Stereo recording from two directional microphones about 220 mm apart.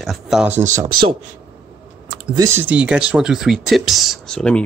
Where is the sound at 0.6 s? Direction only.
35° right (ahead or behind).